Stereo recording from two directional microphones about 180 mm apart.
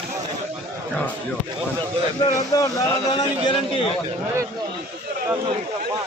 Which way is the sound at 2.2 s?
20° left (ahead or behind).